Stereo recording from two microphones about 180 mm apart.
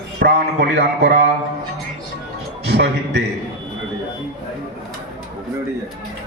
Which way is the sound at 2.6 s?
70° right (ahead or behind).